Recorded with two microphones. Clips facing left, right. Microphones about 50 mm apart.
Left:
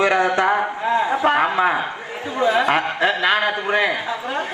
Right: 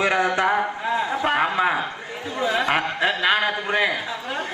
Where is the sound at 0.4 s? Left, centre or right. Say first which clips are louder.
Left 3 dB; centre.